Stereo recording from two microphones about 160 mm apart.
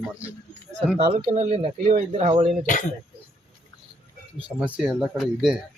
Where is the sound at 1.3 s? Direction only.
45° right (ahead or behind).